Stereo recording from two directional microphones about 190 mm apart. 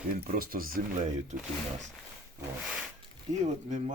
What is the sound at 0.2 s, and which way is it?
Speech, 50° right (ahead or behind).